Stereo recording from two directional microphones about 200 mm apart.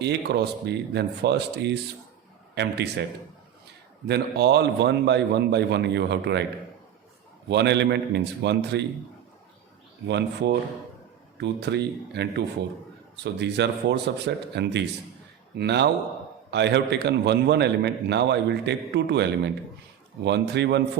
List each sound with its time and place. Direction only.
0.0 s a man's voice: 55° right (ahead or behind)
4.0 s a man's voice: 55° right (ahead or behind)
7.4 s a man's voice: 60° right (ahead or behind)
10.1 s a man's voice: 60° right (ahead or behind)